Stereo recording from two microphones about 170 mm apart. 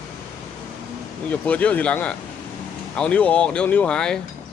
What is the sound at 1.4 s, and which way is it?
Speech, 10° left (ahead or behind).